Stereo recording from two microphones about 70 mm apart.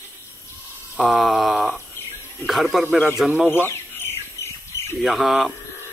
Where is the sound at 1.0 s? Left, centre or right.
Centre.